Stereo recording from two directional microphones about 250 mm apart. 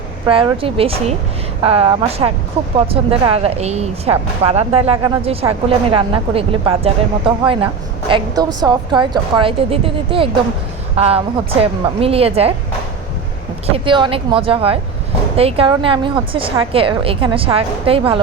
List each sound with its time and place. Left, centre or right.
0.3 s a woman's voice: right
13.7 s speech: right